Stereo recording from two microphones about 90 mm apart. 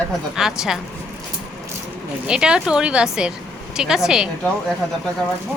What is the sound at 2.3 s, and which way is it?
Speech, 10° right (ahead or behind).